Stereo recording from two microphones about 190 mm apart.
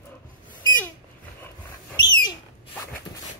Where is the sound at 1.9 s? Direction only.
20° left (ahead or behind).